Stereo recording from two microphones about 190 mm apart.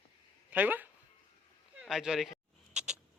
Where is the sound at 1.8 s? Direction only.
Centre (ahead or behind).